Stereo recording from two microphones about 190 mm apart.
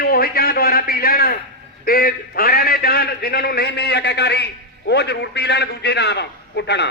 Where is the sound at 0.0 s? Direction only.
55° left (ahead or behind).